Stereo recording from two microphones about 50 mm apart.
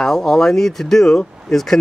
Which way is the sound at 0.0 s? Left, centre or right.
Centre.